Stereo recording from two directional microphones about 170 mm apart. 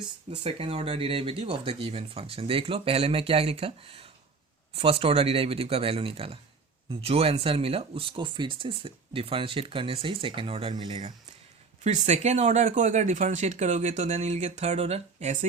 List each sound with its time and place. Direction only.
0.3 s speech: 35° right (ahead or behind)
11.8 s speech: 40° right (ahead or behind)